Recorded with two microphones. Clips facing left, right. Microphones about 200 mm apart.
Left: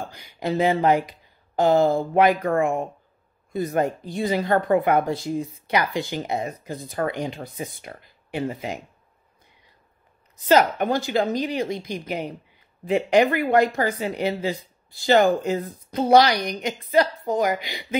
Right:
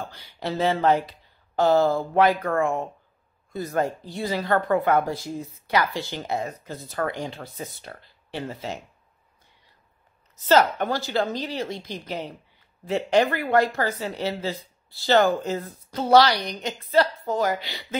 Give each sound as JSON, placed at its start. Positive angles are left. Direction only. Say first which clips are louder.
{"t": 0.0, "sound": "speech", "louder": "left 3 dB", "side_deg": 15}
{"t": 10.3, "sound": "speech", "louder": "left 1 dB", "side_deg": 15}